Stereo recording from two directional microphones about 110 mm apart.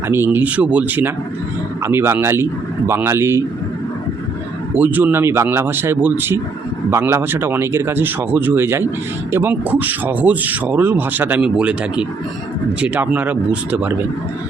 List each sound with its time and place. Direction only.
0.1 s speech: 20° right (ahead or behind)
4.8 s speech: 15° right (ahead or behind)